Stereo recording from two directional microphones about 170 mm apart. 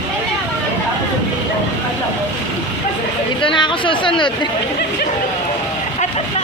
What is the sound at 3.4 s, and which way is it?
Speech, 30° left (ahead or behind).